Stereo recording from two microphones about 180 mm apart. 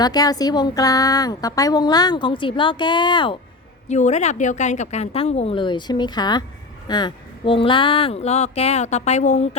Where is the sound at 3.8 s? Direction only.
40° left (ahead or behind).